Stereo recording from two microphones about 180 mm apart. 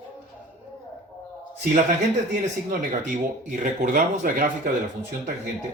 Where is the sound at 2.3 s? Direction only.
45° right (ahead or behind).